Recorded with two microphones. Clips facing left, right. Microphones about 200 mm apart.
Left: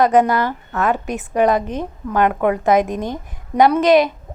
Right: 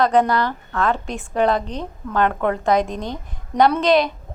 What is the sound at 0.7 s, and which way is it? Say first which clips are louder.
A woman's voice: left 3 dB; 20° left (ahead or behind).